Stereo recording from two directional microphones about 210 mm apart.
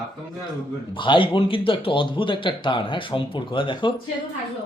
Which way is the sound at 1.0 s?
25° left (ahead or behind).